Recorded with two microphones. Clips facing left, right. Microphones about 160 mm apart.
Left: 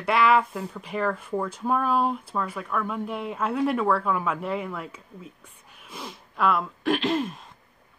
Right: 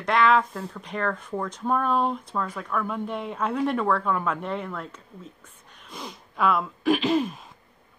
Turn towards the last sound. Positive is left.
turn(degrees=0)  # may be behind; listen again after turning